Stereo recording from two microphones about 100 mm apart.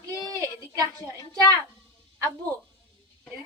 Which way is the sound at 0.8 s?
35° right (ahead or behind).